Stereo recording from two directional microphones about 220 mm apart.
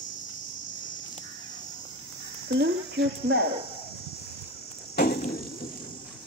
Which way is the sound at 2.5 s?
50° right (ahead or behind).